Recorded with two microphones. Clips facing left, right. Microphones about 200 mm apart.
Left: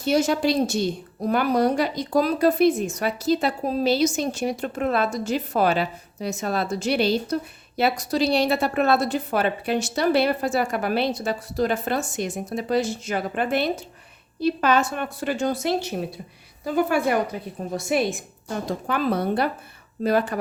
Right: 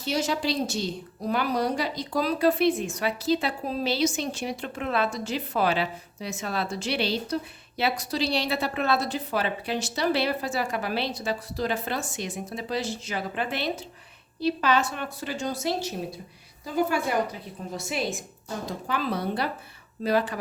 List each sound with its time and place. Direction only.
0.0 s a woman's voice: 50° left (ahead or behind)